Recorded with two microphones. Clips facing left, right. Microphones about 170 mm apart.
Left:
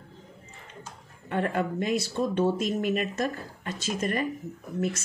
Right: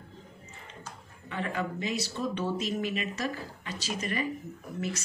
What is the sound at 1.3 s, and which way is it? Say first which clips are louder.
Speech: left 6 dB; 55° left (ahead or behind).